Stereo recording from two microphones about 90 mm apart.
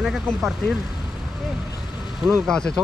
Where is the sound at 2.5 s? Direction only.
10° left (ahead or behind).